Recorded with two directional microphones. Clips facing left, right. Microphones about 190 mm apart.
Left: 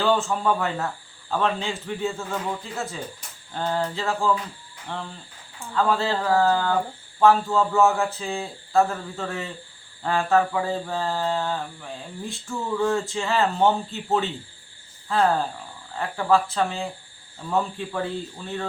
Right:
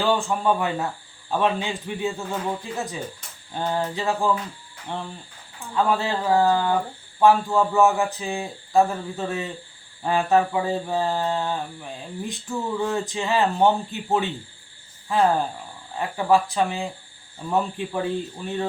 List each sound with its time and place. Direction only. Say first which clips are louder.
0.0 s speech: even; 15° right (ahead or behind)